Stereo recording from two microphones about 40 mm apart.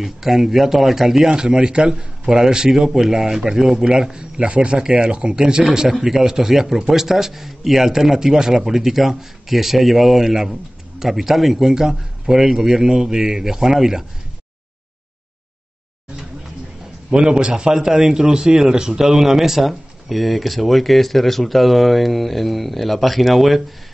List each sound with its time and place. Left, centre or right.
0.0 s a man's voice: centre
1.3 s a man's voice: right
17.1 s a man's voice: right; by 23.6 s centre